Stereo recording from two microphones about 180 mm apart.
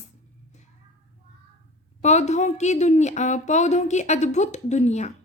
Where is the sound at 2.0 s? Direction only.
40° left (ahead or behind).